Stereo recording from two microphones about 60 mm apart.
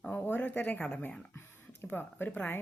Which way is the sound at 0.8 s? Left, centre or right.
Centre.